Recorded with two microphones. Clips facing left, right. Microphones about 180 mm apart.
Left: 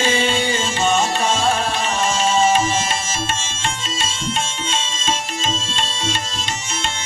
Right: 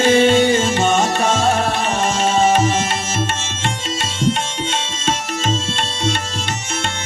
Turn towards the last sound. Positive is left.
turn(degrees=-65)  # may be behind; listen again after turning